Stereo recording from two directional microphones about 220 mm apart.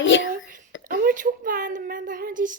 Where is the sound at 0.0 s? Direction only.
60° left (ahead or behind).